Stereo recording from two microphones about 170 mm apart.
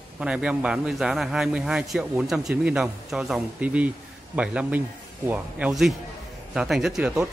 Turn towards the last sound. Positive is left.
turn(degrees=-5)  # may be behind; listen again after turning